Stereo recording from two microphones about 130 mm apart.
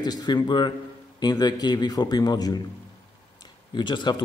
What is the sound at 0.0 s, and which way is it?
A man's voice, 30° left (ahead or behind).